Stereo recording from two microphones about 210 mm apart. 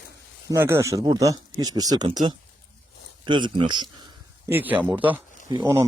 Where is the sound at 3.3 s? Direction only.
20° right (ahead or behind).